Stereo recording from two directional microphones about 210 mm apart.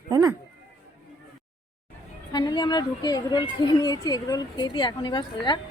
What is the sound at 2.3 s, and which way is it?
A woman's voice, 20° left (ahead or behind).